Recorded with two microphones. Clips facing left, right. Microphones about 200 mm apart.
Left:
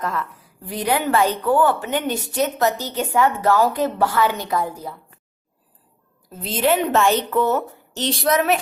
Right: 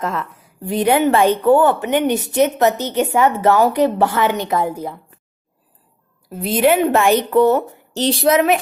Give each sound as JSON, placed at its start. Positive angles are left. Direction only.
{"t": 0.0, "sound": "a woman's voice", "side_deg": -25}
{"t": 6.2, "sound": "a woman's voice", "side_deg": -10}
{"t": 7.9, "sound": "a woman's voice", "side_deg": -30}